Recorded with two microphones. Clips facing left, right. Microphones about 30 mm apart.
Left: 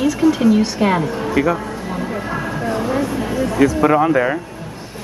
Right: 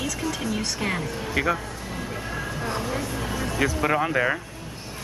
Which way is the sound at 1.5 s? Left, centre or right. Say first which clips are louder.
Left 8 dB; left.